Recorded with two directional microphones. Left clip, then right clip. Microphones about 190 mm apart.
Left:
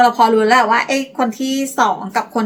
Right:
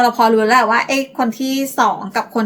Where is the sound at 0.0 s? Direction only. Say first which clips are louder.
Left 1 dB; centre (ahead or behind).